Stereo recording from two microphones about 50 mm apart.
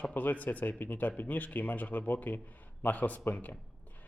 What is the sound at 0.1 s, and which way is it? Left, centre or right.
Speech, left.